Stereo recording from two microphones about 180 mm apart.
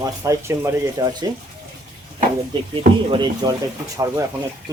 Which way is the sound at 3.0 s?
25° right (ahead or behind).